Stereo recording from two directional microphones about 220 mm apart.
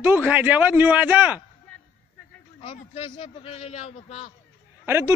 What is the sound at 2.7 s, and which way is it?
A man's voice, 25° left (ahead or behind).